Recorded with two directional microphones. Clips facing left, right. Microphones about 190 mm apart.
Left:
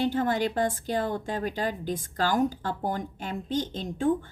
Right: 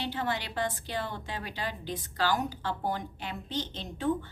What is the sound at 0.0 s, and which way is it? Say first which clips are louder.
A woman's voice: left 8 dB; 45° left (ahead or behind).